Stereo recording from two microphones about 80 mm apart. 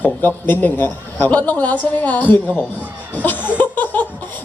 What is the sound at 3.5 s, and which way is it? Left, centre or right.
Laughter, left.